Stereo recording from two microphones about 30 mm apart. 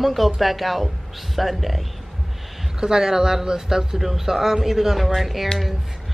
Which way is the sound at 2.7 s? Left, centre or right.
Right.